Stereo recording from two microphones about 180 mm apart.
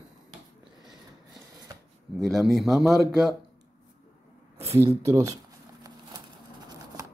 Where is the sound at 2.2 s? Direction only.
Centre (ahead or behind).